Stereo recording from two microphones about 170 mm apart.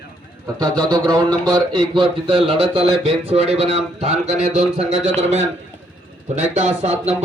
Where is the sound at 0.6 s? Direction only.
25° right (ahead or behind).